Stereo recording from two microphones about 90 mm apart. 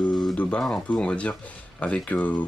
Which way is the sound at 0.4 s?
10° left (ahead or behind).